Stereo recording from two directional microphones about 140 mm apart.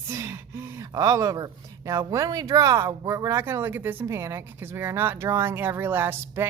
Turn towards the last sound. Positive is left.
turn(degrees=-15)  # may be behind; listen again after turning